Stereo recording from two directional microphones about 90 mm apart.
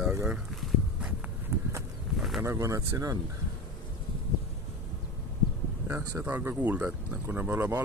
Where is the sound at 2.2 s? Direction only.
Centre (ahead or behind).